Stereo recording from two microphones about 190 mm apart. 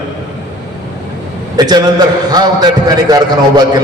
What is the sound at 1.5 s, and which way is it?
A man's voice, 20° right (ahead or behind).